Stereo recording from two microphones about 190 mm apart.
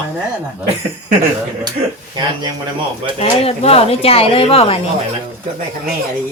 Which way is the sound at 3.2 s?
30° left (ahead or behind).